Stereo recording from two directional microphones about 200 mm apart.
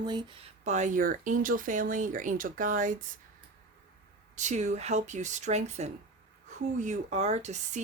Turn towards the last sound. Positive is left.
turn(degrees=-35)  # may be behind; listen again after turning